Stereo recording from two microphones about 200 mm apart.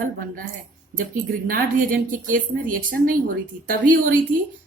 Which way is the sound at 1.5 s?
45° right (ahead or behind).